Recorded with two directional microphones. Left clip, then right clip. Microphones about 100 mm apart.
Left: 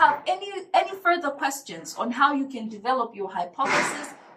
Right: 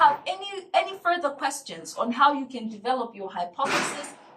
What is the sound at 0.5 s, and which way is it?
A woman's voice, 15° right (ahead or behind).